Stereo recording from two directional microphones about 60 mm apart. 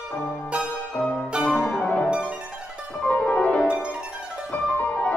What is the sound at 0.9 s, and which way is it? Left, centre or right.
Music, centre.